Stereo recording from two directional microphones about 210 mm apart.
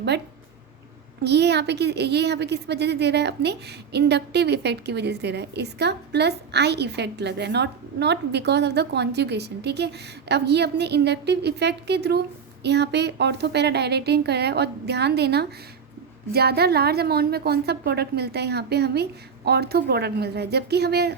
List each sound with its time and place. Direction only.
1.2 s a woman's voice: 55° right (ahead or behind)